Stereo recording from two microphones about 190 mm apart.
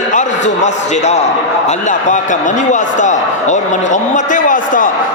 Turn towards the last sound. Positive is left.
turn(degrees=45)  # may be behind; listen again after turning